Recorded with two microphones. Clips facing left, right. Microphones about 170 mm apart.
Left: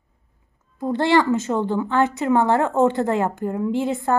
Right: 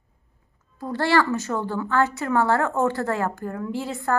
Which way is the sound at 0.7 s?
20° left (ahead or behind).